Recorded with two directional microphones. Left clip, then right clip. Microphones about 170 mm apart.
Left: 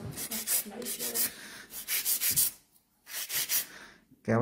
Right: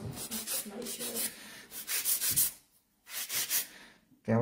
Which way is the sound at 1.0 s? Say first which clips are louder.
Left 3 dB; 20° left (ahead or behind).